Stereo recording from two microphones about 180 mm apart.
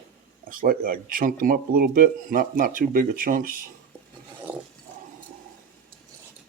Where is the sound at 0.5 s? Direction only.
50° right (ahead or behind).